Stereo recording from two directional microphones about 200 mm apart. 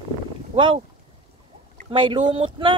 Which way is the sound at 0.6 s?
25° right (ahead or behind).